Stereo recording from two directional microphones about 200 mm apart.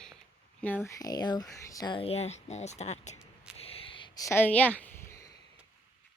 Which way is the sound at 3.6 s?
30° left (ahead or behind).